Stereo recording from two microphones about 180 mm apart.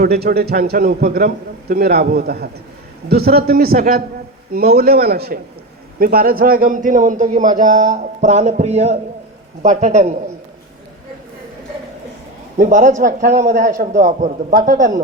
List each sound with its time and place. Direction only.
0.0 s a man's voice: 55° right (ahead or behind); by 10.2 s 35° right (ahead or behind)
12.5 s a man's voice: 45° right (ahead or behind)